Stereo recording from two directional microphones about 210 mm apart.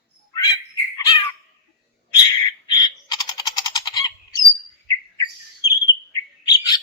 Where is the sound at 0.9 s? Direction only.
20° left (ahead or behind).